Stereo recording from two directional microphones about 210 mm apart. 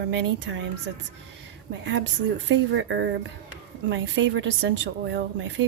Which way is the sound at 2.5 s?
60° right (ahead or behind).